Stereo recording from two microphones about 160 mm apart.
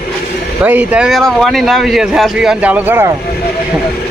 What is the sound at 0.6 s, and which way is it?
Speech, 10° right (ahead or behind).